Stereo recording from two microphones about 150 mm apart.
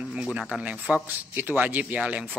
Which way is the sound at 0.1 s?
5° right (ahead or behind).